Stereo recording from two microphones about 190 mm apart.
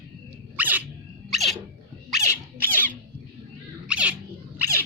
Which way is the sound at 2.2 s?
45° right (ahead or behind).